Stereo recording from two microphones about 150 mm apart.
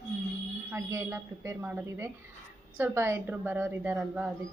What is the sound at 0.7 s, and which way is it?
Speech, 20° right (ahead or behind).